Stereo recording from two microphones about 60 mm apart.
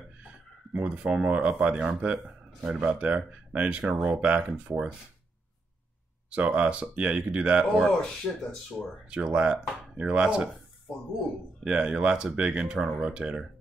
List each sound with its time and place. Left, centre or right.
0.7 s speech: centre
6.3 s speech: centre
7.8 s speech: centre
9.0 s speech: centre
11.6 s speech: centre